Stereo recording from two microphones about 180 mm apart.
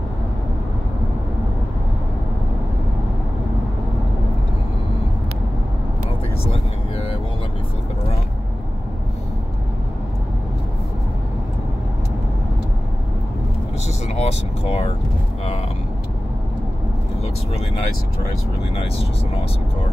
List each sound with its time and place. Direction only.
6.4 s vehicle: 30° left (ahead or behind)
14.0 s vehicle: 35° left (ahead or behind)